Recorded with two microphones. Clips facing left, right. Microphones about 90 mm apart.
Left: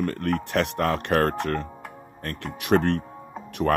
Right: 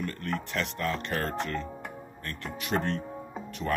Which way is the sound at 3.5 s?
65° left (ahead or behind).